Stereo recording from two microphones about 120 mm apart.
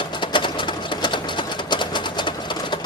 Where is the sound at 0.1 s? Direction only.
40° left (ahead or behind).